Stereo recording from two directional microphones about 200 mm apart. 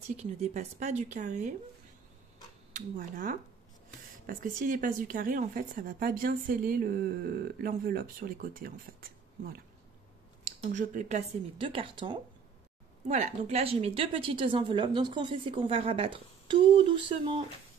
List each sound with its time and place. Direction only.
0.2 s speech: 35° right (ahead or behind)
2.7 s speech: 40° right (ahead or behind)